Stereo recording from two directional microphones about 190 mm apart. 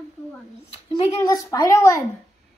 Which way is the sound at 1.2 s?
20° left (ahead or behind).